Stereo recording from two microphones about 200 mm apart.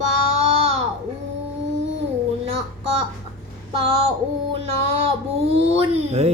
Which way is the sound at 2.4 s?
30° right (ahead or behind).